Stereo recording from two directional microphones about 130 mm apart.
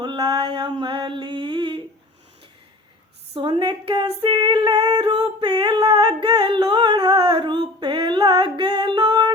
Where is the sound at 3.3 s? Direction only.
35° right (ahead or behind).